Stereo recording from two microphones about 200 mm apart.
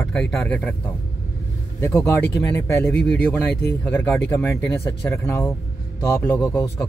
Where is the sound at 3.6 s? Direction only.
10° left (ahead or behind).